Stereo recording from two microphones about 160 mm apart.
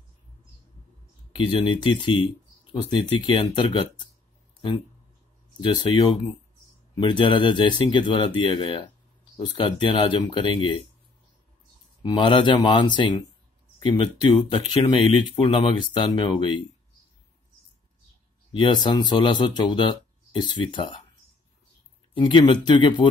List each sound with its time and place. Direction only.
1.3 s speech: 30° left (ahead or behind)
5.6 s speech: 25° left (ahead or behind)
12.0 s speech: 30° left (ahead or behind)
18.5 s speech: 30° left (ahead or behind)
22.1 s speech: 30° left (ahead or behind)